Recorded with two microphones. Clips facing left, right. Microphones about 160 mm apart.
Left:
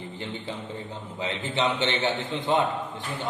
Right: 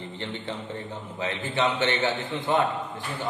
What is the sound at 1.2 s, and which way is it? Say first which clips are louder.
Speech: right 1 dB; 20° left (ahead or behind).